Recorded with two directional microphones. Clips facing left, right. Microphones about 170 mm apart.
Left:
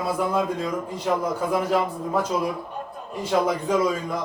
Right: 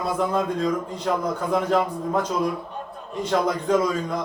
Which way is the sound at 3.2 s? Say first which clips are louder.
Even; 5° left (ahead or behind).